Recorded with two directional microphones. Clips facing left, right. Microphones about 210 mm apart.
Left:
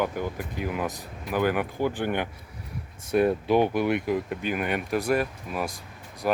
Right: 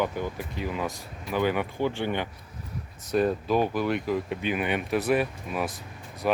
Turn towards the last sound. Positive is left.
turn(degrees=5)  # may be behind; listen again after turning